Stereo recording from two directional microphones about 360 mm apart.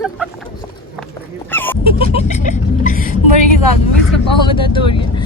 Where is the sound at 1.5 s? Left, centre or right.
Centre.